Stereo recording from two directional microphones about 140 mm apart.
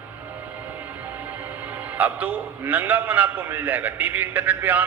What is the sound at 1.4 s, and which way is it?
A man's voice, 10° right (ahead or behind).